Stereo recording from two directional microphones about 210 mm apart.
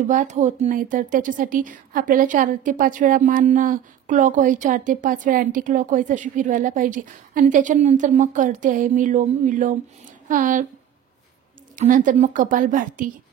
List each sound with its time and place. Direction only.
0.1 s a woman's voice: 35° right (ahead or behind)
11.7 s a woman's voice: 40° right (ahead or behind)